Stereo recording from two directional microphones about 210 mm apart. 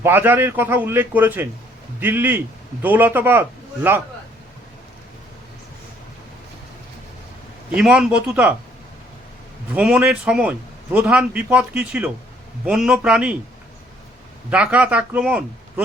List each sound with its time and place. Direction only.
0.0 s a man's voice: 10° right (ahead or behind)
7.8 s speech: 5° right (ahead or behind)
9.7 s speech: 5° right (ahead or behind)
14.5 s a man's voice: 5° right (ahead or behind)